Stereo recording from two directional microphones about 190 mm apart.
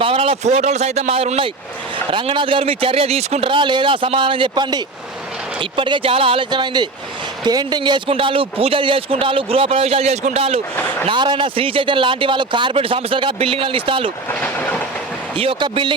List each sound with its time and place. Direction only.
0.0 s speech: 30° right (ahead or behind)
14.3 s vehicle: 10° left (ahead or behind)
15.4 s speech: 30° right (ahead or behind)